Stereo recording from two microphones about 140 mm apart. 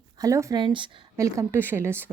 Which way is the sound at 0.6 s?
35° right (ahead or behind).